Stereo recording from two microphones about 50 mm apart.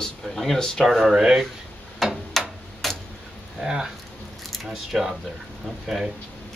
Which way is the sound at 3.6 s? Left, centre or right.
Centre.